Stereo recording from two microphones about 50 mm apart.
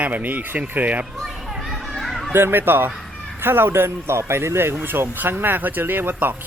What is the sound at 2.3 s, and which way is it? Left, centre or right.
Speech, right.